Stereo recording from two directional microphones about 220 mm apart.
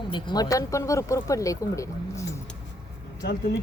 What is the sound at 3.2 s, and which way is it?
Speech, 50° left (ahead or behind).